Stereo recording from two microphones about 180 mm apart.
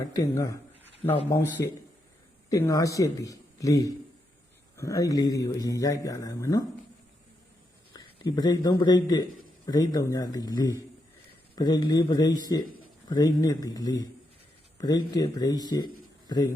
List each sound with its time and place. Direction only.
0.0 s a man's voice: 20° left (ahead or behind)
2.5 s a man's voice: 20° left (ahead or behind)
7.9 s a sound: 25° left (ahead or behind)
8.8 s a man's voice: 25° left (ahead or behind)